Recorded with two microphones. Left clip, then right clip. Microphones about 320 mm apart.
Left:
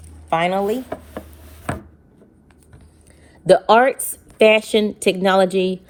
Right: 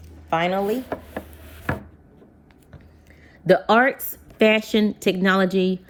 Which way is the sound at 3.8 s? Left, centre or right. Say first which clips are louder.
Left 3 dB; centre.